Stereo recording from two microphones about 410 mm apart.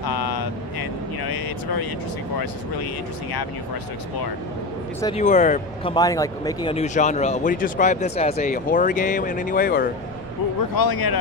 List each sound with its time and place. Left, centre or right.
0.0 s vehicle: left
5.0 s speech: centre
10.8 s a man's voice: left